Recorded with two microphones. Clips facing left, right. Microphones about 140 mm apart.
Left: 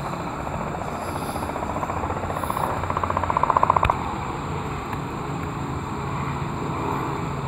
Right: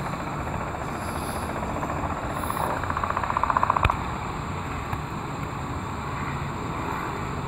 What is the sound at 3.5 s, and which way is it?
Vehicle, 50° left (ahead or behind).